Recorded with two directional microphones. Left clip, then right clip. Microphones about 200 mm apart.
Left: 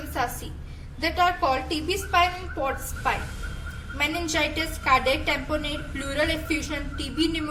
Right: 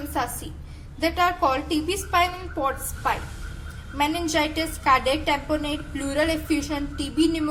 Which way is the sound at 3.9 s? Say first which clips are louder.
Right 2 dB; 25° right (ahead or behind).